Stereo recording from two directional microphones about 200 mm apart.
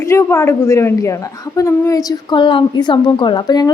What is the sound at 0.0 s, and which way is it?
A woman's voice, 15° left (ahead or behind).